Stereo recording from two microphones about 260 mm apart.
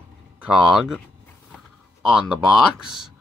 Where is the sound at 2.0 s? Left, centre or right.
Centre.